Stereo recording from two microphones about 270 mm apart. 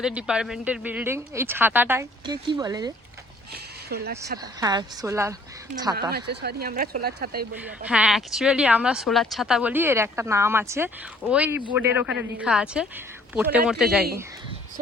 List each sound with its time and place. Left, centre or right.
0.0 s speech: centre
3.8 s speech: right
4.6 s speech: centre
6.1 s speech: right
7.9 s speech: centre